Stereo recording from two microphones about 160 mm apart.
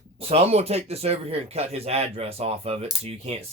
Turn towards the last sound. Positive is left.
turn(degrees=-40)  # may be behind; listen again after turning